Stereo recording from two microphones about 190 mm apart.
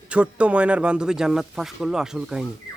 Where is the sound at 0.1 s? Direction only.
5° right (ahead or behind).